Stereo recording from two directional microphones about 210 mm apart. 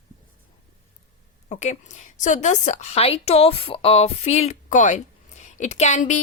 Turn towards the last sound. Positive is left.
turn(degrees=35)  # may be behind; listen again after turning